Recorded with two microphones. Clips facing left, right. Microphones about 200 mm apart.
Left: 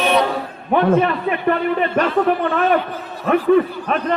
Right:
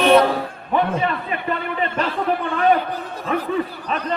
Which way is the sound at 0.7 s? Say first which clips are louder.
Left 6 dB; 60° left (ahead or behind).